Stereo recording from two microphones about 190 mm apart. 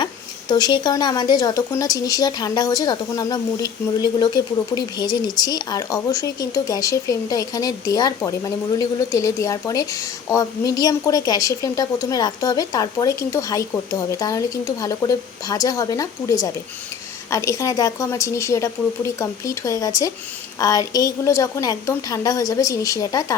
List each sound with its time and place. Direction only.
0.0 s a woman's voice: 20° left (ahead or behind)